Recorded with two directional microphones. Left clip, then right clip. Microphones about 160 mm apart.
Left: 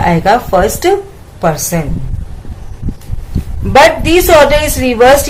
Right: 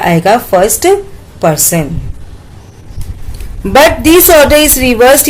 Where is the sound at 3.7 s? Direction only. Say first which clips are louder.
Right 1 dB; 40° right (ahead or behind).